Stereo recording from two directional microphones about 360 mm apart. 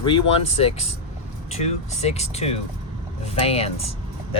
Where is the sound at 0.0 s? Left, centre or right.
Centre.